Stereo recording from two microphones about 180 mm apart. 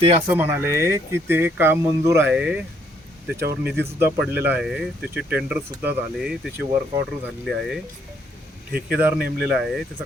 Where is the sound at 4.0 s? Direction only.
10° right (ahead or behind).